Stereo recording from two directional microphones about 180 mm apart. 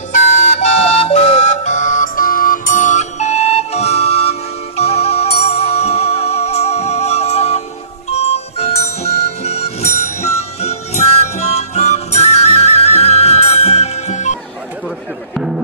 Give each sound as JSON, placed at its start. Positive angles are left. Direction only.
{"t": 0.1, "sound": "music", "side_deg": 40}
{"t": 15.3, "sound": "music", "side_deg": -5}